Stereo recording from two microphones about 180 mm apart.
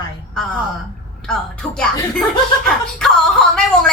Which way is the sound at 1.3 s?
5° left (ahead or behind).